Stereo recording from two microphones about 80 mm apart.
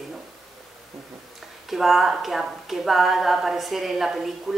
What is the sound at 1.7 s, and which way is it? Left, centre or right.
A woman's voice, centre.